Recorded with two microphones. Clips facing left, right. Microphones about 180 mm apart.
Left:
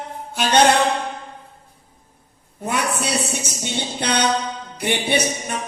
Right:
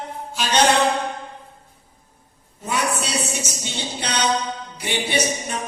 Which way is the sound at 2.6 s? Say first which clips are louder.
Left 1 dB; 55° left (ahead or behind).